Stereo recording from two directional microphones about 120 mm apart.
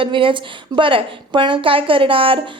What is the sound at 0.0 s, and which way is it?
Speech, 45° right (ahead or behind).